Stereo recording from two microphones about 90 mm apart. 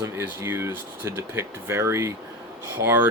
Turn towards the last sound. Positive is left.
turn(degrees=-25)  # may be behind; listen again after turning